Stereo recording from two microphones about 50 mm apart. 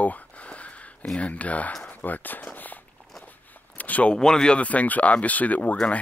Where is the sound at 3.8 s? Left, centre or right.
Left.